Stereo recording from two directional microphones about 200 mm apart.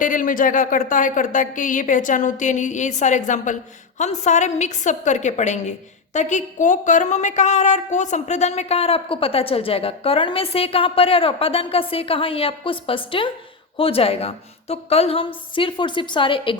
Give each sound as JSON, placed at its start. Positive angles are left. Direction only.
{"t": 0.0, "sound": "a woman's voice", "side_deg": 40}